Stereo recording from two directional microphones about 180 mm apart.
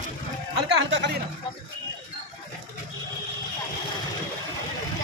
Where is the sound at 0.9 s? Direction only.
75° right (ahead or behind).